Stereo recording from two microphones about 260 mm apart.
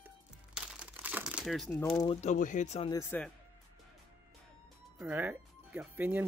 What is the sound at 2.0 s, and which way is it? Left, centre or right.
Speech, left.